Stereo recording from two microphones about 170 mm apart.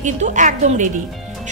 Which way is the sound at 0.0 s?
45° right (ahead or behind).